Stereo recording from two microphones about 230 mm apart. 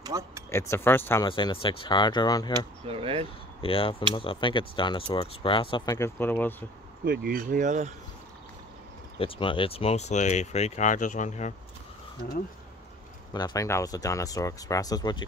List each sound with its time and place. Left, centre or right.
0.0 s a sound: centre
0.5 s speech: centre
2.9 s speech: right
3.6 s speech: left; by 6.5 s centre
7.1 s speech: right
9.2 s speech: left
13.3 s speech: centre